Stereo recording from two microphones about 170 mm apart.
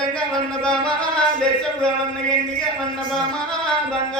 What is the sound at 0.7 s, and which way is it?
Music, 5° left (ahead or behind).